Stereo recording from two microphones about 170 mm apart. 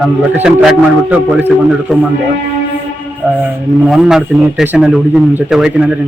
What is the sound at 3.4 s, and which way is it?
Speech, 5° right (ahead or behind).